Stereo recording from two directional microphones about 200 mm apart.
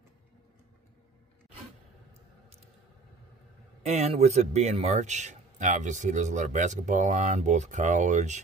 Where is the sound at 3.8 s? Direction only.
35° right (ahead or behind).